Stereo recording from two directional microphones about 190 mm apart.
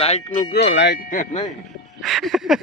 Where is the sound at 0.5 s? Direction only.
65° left (ahead or behind).